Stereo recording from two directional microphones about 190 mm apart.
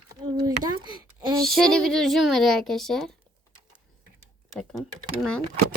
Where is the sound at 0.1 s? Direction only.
20° right (ahead or behind).